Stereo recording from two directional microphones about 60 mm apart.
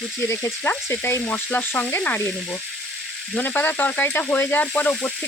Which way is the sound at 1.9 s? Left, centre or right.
Left.